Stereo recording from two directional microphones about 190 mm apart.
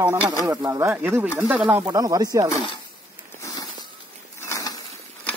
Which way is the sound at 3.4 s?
20° left (ahead or behind).